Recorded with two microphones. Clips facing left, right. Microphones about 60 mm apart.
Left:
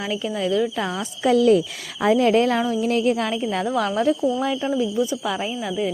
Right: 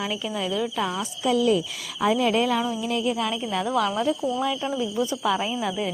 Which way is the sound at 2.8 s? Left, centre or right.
Left.